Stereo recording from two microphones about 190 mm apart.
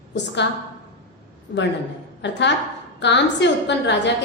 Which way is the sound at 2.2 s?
70° left (ahead or behind).